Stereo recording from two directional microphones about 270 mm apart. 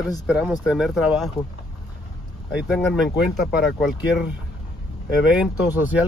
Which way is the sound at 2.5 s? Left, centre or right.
Centre.